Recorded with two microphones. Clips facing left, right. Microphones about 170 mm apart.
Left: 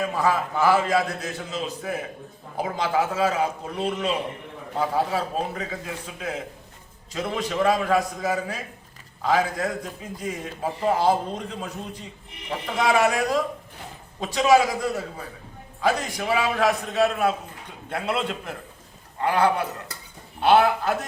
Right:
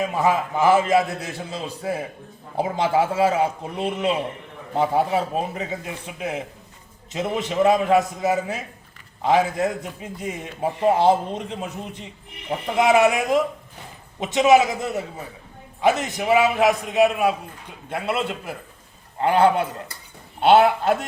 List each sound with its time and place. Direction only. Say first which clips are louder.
0.0 s a man's voice: right 2 dB; 20° right (ahead or behind)
19.2 s a man's voice: right 4 dB; 25° right (ahead or behind)